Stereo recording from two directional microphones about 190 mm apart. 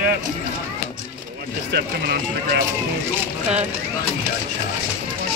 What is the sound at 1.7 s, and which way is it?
Speech, 60° right (ahead or behind).